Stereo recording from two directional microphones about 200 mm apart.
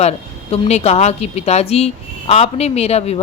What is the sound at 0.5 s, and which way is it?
Speech, 30° left (ahead or behind).